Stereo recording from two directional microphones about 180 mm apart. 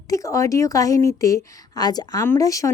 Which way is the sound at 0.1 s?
15° left (ahead or behind).